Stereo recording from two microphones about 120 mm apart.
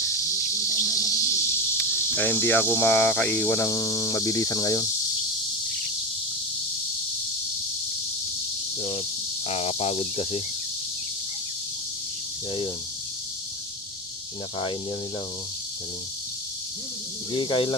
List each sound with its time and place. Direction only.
0.8 s speech: 25° left (ahead or behind)
9.5 s speech: 60° left (ahead or behind)
17.3 s speech: 40° left (ahead or behind)